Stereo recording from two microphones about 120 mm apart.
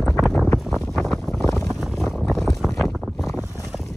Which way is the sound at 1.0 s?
10° left (ahead or behind).